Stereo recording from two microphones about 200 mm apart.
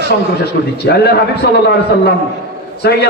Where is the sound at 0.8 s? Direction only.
55° left (ahead or behind).